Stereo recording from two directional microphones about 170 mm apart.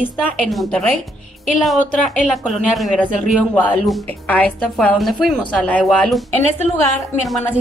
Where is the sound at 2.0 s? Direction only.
5° left (ahead or behind).